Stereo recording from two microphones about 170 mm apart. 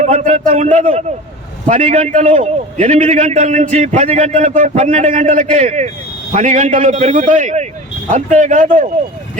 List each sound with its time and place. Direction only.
0.0 s a man's voice: 45° right (ahead or behind)